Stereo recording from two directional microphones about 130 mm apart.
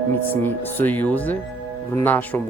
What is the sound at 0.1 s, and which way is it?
Speech, 15° left (ahead or behind).